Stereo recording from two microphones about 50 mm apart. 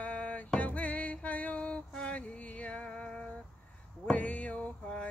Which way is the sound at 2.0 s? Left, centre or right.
Left.